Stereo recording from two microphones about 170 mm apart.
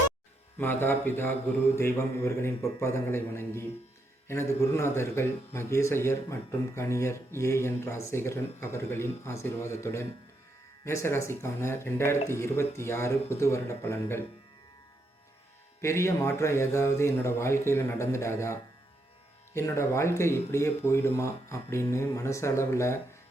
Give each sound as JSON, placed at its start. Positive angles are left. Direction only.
{"t": 0.6, "sound": "a man's voice", "side_deg": 10}
{"t": 15.8, "sound": "a man's voice", "side_deg": 15}